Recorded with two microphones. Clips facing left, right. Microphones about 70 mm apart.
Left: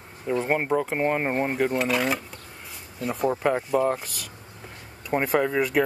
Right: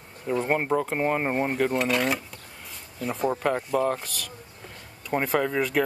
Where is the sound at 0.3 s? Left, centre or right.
Centre.